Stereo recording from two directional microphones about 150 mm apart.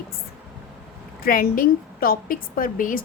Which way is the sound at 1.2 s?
75° left (ahead or behind).